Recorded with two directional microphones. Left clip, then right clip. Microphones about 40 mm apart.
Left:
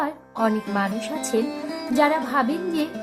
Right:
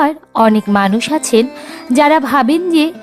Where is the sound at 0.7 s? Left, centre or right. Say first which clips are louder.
Right 11 dB; centre.